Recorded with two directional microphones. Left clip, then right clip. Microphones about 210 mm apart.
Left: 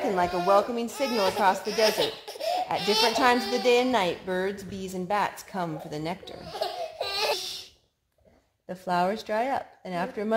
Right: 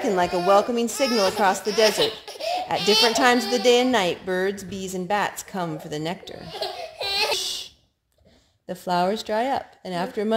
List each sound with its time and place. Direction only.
0.0 s a woman's voice: 50° right (ahead or behind)
1.1 s a child's voice: 35° right (ahead or behind)
3.1 s a woman's voice: 50° right (ahead or behind)
6.6 s laughter: 15° right (ahead or behind)
8.6 s a woman's voice: 55° right (ahead or behind)